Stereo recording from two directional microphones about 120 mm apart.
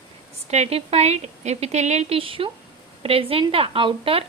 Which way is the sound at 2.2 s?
50° right (ahead or behind).